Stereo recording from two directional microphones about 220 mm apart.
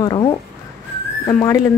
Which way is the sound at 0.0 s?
20° left (ahead or behind).